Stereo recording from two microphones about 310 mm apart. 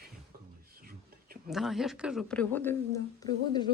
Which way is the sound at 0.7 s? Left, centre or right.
Right.